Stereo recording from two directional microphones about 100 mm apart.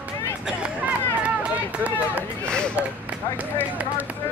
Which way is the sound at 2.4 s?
10° left (ahead or behind).